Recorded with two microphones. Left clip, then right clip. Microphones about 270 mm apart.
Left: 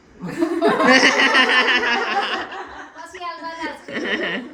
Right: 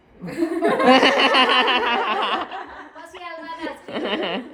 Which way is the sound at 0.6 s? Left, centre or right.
Centre.